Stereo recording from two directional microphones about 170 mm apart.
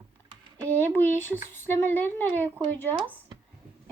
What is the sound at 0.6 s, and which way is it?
Speech, 10° left (ahead or behind).